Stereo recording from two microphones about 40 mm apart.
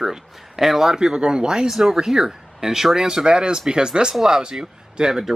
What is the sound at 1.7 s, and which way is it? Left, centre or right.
Speech, centre.